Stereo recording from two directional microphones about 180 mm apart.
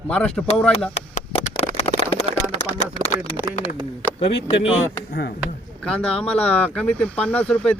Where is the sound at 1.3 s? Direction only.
35° left (ahead or behind).